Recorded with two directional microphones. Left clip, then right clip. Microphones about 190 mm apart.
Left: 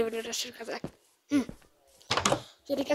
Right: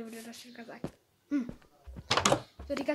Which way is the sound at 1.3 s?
40° left (ahead or behind).